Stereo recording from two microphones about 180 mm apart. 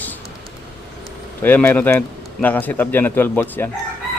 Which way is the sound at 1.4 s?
10° left (ahead or behind).